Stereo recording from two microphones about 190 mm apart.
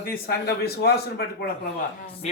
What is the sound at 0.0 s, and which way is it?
Speech, 50° left (ahead or behind).